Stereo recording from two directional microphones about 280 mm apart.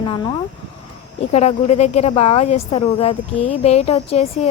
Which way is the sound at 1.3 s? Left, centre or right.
Left.